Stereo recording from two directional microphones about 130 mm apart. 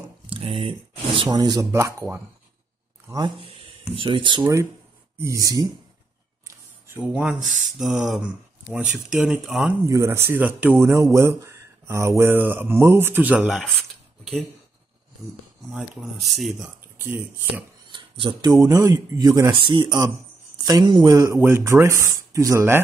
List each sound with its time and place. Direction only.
0.3 s speech: 45° right (ahead or behind); by 2.2 s 20° right (ahead or behind)
3.1 s speech: 30° right (ahead or behind)
3.3 s speech: 45° right (ahead or behind); by 5.7 s 25° right (ahead or behind)
6.4 s speech: 15° right (ahead or behind)
9.8 s speech: 20° right (ahead or behind)
15.6 s speech: centre (ahead or behind)
17.9 s speech: 40° right (ahead or behind)